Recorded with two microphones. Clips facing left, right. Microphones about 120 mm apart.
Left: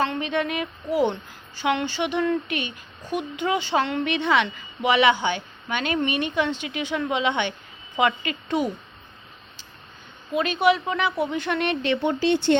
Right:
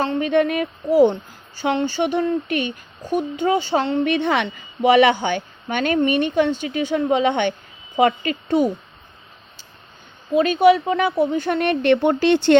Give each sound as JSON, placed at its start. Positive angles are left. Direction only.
{"t": 0.0, "sound": "a woman's voice", "side_deg": -40}
{"t": 10.3, "sound": "a woman's voice", "side_deg": -40}